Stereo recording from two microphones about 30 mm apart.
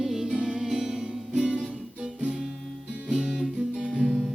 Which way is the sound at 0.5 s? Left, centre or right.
Right.